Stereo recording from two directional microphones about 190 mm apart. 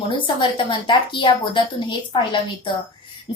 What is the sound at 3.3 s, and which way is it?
Speech, 25° left (ahead or behind).